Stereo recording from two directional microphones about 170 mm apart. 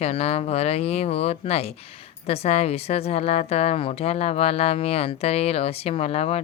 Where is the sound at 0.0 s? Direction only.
35° left (ahead or behind).